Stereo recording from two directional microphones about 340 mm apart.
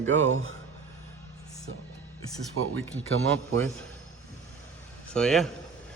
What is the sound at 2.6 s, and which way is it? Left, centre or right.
Speech, right.